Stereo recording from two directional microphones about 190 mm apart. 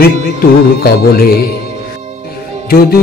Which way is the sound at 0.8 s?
50° left (ahead or behind).